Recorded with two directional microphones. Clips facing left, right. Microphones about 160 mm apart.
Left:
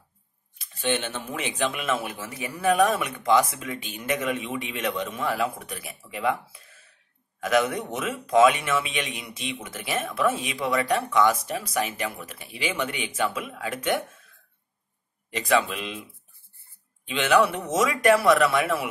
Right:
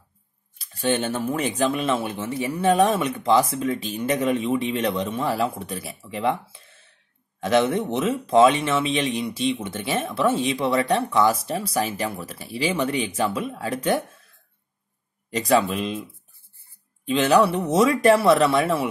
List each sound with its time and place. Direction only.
0.6 s speech: 40° right (ahead or behind)
15.3 s speech: 40° right (ahead or behind)
17.0 s speech: 35° right (ahead or behind)